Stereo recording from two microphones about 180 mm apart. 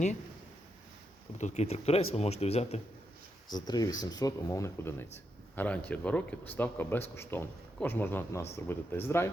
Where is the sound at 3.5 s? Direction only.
20° left (ahead or behind).